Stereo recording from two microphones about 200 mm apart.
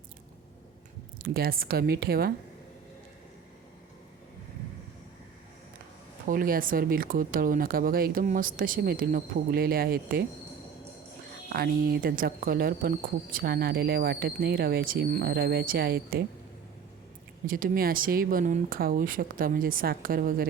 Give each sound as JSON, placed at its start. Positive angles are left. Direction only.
{"t": 1.2, "sound": "speech", "side_deg": -45}
{"t": 6.2, "sound": "speech", "side_deg": -45}
{"t": 11.4, "sound": "speech", "side_deg": -45}
{"t": 17.4, "sound": "speech", "side_deg": -45}